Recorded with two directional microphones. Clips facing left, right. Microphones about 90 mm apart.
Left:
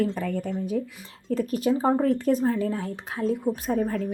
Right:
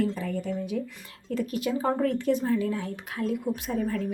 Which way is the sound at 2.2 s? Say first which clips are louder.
Left 2 dB; 40° left (ahead or behind).